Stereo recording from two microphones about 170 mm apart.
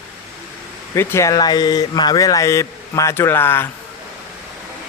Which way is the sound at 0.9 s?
15° left (ahead or behind).